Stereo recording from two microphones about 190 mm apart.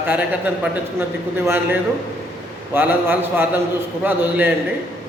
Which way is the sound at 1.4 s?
10° right (ahead or behind).